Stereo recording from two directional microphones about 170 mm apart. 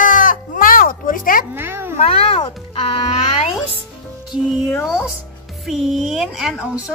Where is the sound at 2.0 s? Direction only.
30° left (ahead or behind).